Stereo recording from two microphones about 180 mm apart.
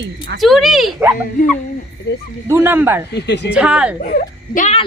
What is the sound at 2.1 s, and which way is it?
Speech, 65° left (ahead or behind).